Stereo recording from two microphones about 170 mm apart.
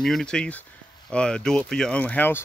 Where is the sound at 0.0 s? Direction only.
5° left (ahead or behind).